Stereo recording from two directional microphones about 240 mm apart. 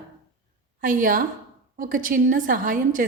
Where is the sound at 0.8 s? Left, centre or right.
Right.